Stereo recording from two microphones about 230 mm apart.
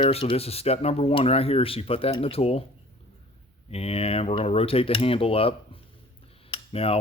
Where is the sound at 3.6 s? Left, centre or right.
Left.